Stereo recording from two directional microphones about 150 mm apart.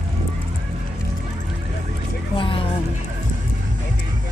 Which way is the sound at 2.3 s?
35° left (ahead or behind).